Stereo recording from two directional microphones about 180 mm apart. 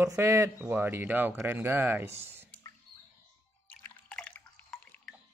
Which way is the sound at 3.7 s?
5° left (ahead or behind).